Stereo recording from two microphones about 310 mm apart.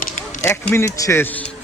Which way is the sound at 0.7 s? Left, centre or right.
Centre.